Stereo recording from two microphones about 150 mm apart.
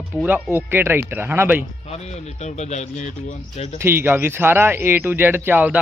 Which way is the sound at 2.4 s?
50° left (ahead or behind).